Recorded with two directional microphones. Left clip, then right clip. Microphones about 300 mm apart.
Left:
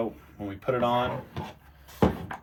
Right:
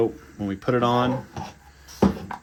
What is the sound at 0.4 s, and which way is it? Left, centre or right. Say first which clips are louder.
Speech: right 4 dB; right.